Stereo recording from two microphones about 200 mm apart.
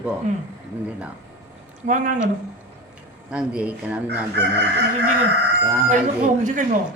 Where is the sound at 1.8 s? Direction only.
40° right (ahead or behind).